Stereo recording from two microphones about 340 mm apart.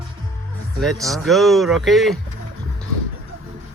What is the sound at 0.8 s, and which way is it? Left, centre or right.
Speech, centre.